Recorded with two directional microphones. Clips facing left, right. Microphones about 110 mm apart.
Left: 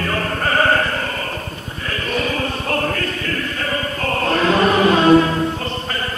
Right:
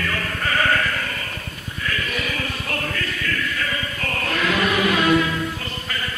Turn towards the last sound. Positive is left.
turn(degrees=35)  # may be behind; listen again after turning